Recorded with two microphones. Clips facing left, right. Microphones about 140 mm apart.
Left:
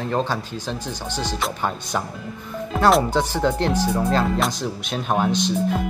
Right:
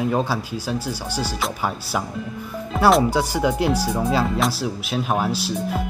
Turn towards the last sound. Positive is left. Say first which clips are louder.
# left 3 dB
turn(degrees=-5)  # may be behind; listen again after turning